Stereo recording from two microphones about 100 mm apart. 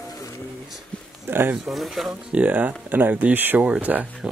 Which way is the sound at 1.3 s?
20° right (ahead or behind).